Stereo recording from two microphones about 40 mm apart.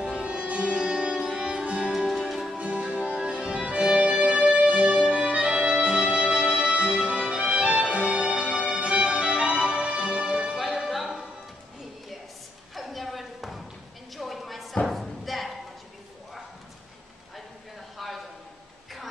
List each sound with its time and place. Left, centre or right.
0.0 s sitar: right
1.9 s music: centre
2.5 s music: right
3.2 s music: right
10.6 s music: centre
12.7 s a sound: centre
14.9 s thump: centre
17.9 s a sound: centre